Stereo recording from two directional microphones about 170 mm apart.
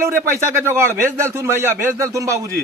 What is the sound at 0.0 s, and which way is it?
A man's voice, 15° right (ahead or behind).